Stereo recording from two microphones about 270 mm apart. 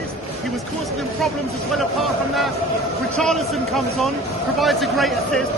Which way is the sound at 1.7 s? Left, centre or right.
Centre.